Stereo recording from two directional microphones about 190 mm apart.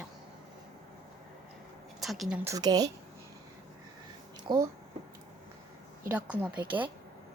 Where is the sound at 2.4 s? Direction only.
20° right (ahead or behind).